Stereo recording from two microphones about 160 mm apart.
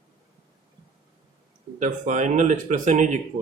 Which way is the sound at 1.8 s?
50° right (ahead or behind).